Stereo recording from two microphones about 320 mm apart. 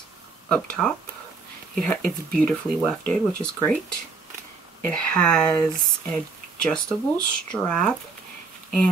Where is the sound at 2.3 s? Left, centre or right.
Centre.